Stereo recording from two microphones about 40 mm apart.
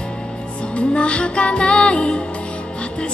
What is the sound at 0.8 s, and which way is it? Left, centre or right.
Music, left.